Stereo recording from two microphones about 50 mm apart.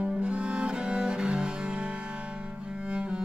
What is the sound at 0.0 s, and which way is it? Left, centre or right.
Cello, right.